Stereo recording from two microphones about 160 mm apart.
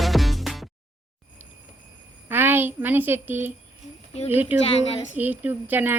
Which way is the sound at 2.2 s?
15° right (ahead or behind).